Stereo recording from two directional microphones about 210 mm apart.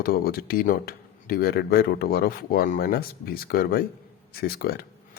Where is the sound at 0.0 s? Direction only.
45° left (ahead or behind).